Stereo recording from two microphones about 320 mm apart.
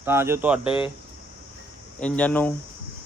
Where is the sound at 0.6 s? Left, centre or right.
Centre.